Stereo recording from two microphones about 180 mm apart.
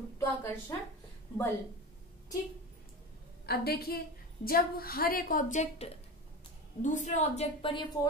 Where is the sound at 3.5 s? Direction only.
60° left (ahead or behind).